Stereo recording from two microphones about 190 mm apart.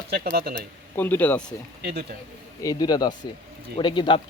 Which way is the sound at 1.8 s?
60° right (ahead or behind).